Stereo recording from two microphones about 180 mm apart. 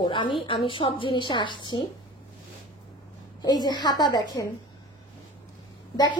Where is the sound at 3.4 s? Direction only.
25° left (ahead or behind).